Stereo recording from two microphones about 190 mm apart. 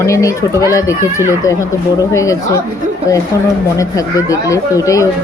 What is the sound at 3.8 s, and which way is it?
Speech, 15° left (ahead or behind).